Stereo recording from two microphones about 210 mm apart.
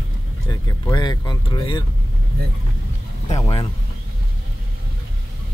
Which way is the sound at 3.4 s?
25° left (ahead or behind).